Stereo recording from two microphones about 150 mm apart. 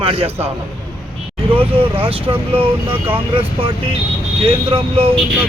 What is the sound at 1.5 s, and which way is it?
Speech, 40° right (ahead or behind).